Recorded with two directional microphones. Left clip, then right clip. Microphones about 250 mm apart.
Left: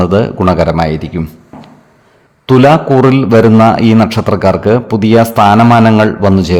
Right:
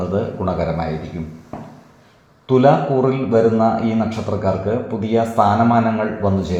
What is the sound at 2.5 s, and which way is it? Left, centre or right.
A man's voice, left.